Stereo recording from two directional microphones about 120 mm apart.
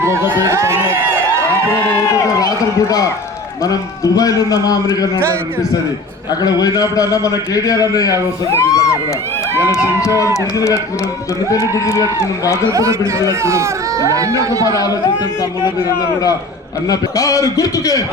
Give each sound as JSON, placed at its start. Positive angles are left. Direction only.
{"t": 0.0, "sound": "speech", "side_deg": -20}
{"t": 2.0, "sound": "a man's voice", "side_deg": 25}
{"t": 6.4, "sound": "a man's voice", "side_deg": 30}
{"t": 10.0, "sound": "a man's voice", "side_deg": 25}
{"t": 11.5, "sound": "a man's voice", "side_deg": 30}
{"t": 12.7, "sound": "speech", "side_deg": -25}
{"t": 14.8, "sound": "a man's voice", "side_deg": 30}
{"t": 16.9, "sound": "a man's voice", "side_deg": 30}